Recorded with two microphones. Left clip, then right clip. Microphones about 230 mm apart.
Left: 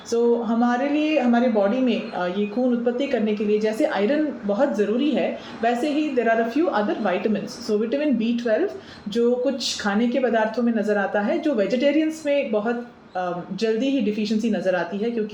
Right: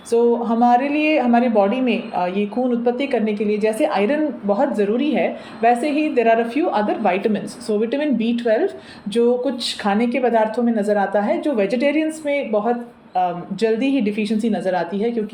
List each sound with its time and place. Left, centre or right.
0.1 s a woman's voice: right